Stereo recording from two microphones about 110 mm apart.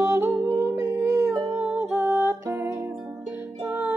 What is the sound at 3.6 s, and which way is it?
Music, 15° right (ahead or behind).